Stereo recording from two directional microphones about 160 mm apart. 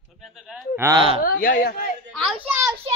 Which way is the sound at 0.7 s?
15° right (ahead or behind).